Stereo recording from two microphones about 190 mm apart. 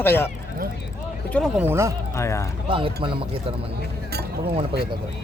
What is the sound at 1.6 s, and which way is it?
Speech, 15° right (ahead or behind).